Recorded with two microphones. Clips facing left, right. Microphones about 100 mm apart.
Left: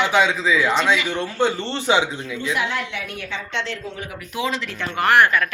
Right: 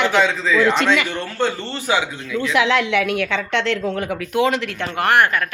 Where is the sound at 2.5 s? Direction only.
90° right.